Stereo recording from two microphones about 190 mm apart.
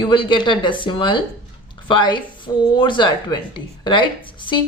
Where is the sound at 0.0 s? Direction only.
25° left (ahead or behind).